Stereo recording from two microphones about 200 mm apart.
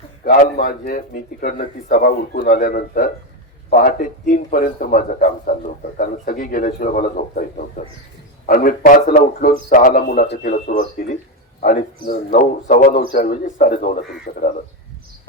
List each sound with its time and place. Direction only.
0.3 s speech: 45° left (ahead or behind)